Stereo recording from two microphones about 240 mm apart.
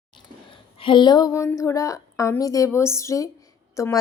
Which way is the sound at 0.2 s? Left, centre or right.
Left.